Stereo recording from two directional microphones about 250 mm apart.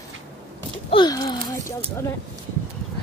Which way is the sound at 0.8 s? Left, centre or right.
Centre.